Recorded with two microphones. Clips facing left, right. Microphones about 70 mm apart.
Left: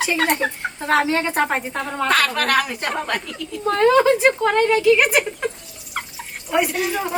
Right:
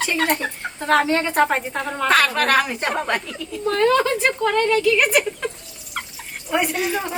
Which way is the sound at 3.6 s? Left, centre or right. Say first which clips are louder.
Left 3 dB; centre.